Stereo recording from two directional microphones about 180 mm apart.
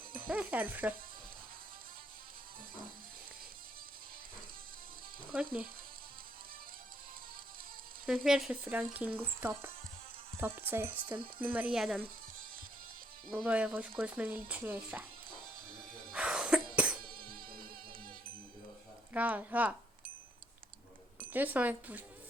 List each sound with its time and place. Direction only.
0.3 s speech: 10° right (ahead or behind)
8.0 s frying: centre (ahead or behind)
8.8 s speech: 5° right (ahead or behind)
11.3 s frying: 10° right (ahead or behind)
13.3 s speech: 5° right (ahead or behind)
16.1 s cough: 5° right (ahead or behind)
16.7 s insect: 5° right (ahead or behind)
17.1 s music: 30° right (ahead or behind)
19.1 s speech: 10° right (ahead or behind)
21.3 s speech: 10° right (ahead or behind)